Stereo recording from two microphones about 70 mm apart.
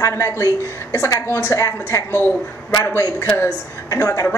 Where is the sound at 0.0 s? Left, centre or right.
Left.